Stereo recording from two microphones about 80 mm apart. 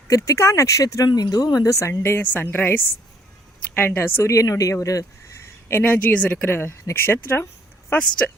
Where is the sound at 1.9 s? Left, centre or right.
Left.